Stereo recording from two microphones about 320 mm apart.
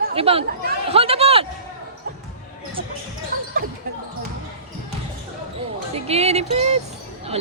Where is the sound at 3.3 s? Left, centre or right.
Right.